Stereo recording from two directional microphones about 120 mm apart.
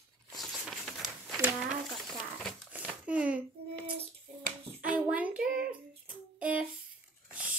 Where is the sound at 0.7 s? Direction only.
5° left (ahead or behind).